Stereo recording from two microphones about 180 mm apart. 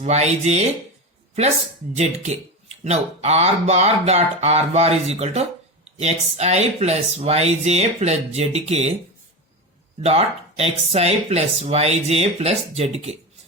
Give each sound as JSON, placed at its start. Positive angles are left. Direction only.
{"t": 0.0, "sound": "speech", "side_deg": -40}
{"t": 1.9, "sound": "speech", "side_deg": -40}
{"t": 10.0, "sound": "speech", "side_deg": -35}